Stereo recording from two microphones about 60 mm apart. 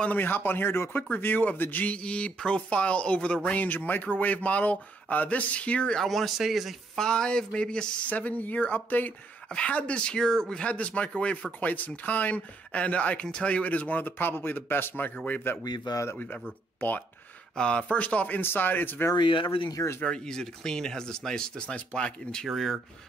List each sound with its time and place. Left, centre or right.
0.1 s speech: left
3.4 s speech: left
5.9 s speech: centre
7.0 s speech: centre
8.1 s speech: left
15.6 s a man's voice: left
17.6 s speech: centre
18.4 s speech: left
20.0 s speech: centre
22.5 s speech: centre